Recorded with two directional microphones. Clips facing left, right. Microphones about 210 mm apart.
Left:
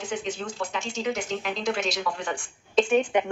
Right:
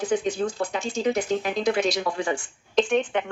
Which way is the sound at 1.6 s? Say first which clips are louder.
Right 3 dB; 55° right (ahead or behind).